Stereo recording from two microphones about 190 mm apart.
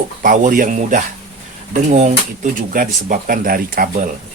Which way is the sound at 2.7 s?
45° right (ahead or behind).